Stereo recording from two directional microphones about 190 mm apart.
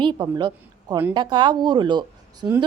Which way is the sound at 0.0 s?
25° right (ahead or behind).